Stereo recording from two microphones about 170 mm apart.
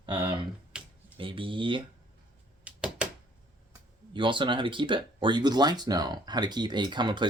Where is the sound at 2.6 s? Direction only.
5° right (ahead or behind).